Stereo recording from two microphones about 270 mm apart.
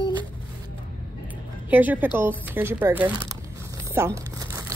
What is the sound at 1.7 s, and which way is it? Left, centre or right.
Speech, centre.